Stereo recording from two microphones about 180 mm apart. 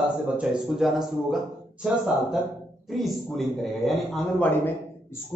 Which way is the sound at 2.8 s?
Centre (ahead or behind).